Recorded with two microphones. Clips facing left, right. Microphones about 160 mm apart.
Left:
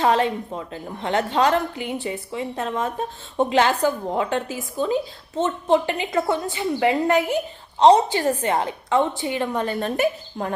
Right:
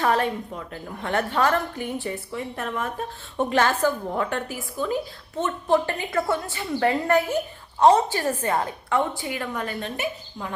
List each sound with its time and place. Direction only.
0.0 s a woman's voice: 20° left (ahead or behind)
9.8 s speech: 45° left (ahead or behind)